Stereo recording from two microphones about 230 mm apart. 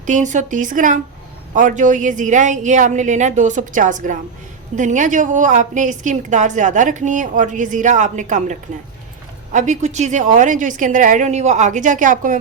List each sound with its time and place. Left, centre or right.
0.0 s a woman's voice: right